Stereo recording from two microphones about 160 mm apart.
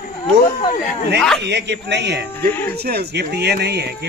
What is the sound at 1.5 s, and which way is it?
Speech, 90° right.